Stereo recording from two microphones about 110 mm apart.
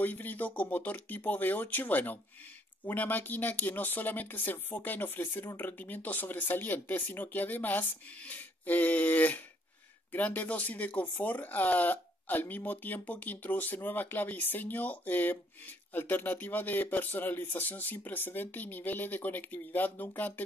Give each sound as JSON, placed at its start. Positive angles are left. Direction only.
{"t": 0.0, "sound": "speech", "side_deg": 15}